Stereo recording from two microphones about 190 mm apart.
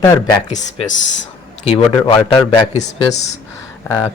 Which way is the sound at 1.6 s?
30° left (ahead or behind).